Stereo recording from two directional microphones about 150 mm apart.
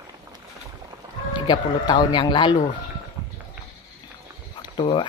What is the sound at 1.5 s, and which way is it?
Speech, 30° left (ahead or behind).